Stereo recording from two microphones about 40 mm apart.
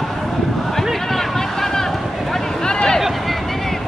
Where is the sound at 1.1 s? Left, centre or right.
Centre.